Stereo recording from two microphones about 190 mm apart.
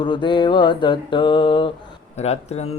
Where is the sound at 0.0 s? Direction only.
25° left (ahead or behind).